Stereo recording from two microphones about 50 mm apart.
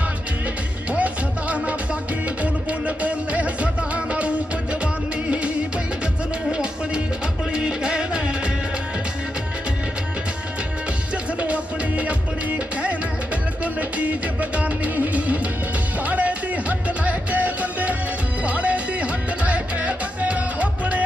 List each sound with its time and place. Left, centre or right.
0.9 s music: right
11.3 s music: right